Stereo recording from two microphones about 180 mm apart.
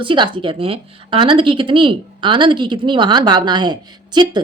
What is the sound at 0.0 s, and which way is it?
A woman's voice, 25° right (ahead or behind).